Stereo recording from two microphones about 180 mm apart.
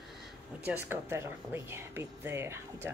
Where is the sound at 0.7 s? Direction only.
10° right (ahead or behind).